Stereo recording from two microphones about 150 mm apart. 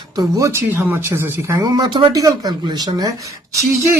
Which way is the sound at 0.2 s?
20° right (ahead or behind).